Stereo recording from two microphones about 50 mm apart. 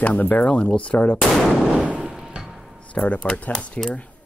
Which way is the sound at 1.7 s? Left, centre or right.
Right.